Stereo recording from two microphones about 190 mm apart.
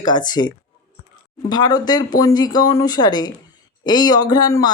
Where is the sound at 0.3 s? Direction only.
20° left (ahead or behind).